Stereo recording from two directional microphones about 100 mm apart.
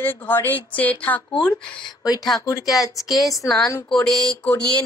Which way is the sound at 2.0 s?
40° left (ahead or behind).